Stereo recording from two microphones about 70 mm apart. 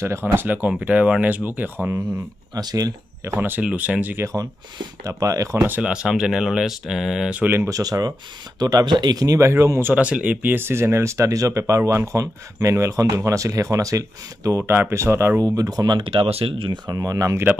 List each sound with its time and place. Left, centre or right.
0.0 s speech: right
2.5 s speech: right
3.3 s speech: right
4.2 s speech: right
5.8 s speech: centre
7.3 s speech: right
7.7 s speech: right
8.5 s speech: right
9.9 s speech: centre; by 14.6 s right
14.6 s speech: right
15.5 s speech: right
16.9 s speech: right